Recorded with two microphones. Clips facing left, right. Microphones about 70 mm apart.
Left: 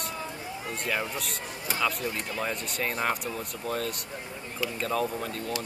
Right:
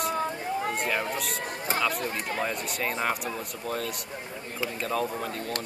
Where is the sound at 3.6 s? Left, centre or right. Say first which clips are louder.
Left 1 dB; centre.